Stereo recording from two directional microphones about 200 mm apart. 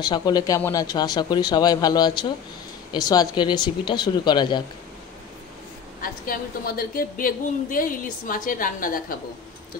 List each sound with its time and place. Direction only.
0.0 s speech: 20° left (ahead or behind)
6.2 s a woman's voice: 50° left (ahead or behind)